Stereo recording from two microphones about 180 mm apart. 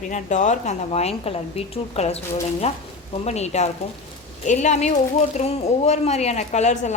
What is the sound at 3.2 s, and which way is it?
A woman's voice, 35° left (ahead or behind).